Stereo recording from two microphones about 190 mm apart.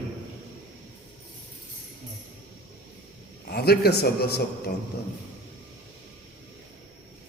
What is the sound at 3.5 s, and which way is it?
Speech, 55° left (ahead or behind).